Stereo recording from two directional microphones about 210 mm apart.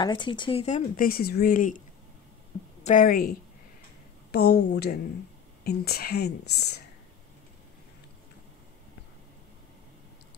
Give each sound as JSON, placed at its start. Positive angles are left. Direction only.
{"t": 0.0, "sound": "speech", "side_deg": 20}
{"t": 2.8, "sound": "speech", "side_deg": 35}
{"t": 4.3, "sound": "speech", "side_deg": 50}